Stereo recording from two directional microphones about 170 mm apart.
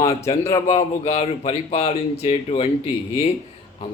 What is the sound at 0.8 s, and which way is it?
Speech, 40° left (ahead or behind).